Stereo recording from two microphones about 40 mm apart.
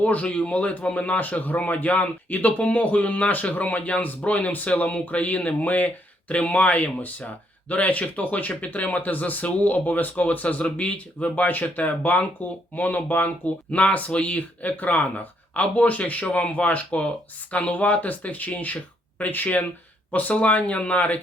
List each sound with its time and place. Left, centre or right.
0.0 s speech: left